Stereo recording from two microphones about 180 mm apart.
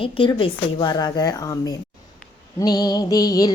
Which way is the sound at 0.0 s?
25° left (ahead or behind).